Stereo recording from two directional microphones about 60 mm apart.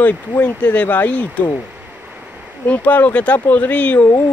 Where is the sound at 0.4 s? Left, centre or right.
Left.